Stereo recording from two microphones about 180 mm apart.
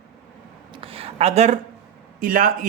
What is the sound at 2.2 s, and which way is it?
Speech, 50° right (ahead or behind).